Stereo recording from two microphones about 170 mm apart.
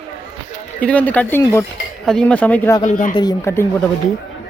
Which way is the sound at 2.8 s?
50° left (ahead or behind).